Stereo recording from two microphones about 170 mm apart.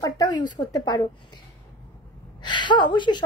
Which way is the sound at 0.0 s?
20° left (ahead or behind).